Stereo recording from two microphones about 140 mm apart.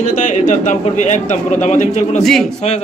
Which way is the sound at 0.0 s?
65° left (ahead or behind).